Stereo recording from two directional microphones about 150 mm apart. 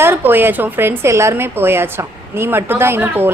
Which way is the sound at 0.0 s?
15° right (ahead or behind).